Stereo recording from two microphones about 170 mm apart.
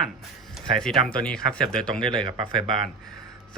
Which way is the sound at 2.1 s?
25° right (ahead or behind).